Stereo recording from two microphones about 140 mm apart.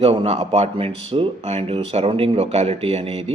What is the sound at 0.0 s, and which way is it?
A man's voice, 45° right (ahead or behind).